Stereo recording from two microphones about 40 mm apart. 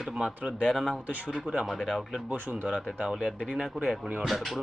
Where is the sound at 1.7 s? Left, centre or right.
Centre.